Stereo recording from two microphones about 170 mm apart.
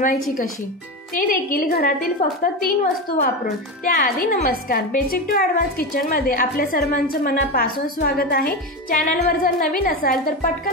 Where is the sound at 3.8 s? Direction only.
60° left (ahead or behind).